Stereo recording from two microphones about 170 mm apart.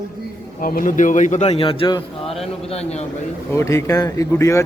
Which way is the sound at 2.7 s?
40° left (ahead or behind).